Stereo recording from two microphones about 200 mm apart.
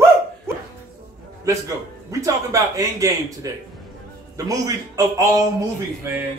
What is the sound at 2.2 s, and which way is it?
Speech, 15° right (ahead or behind).